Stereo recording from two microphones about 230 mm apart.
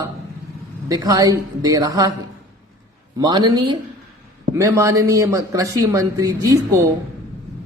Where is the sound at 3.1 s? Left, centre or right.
Centre.